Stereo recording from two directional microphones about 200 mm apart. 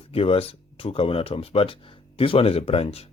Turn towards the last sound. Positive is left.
turn(degrees=30)  # may be behind; listen again after turning